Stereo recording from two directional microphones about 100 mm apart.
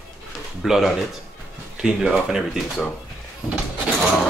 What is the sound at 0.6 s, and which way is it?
Speech, centre (ahead or behind).